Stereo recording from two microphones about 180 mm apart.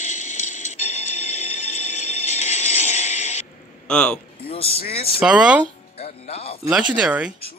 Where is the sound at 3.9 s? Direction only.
5° left (ahead or behind).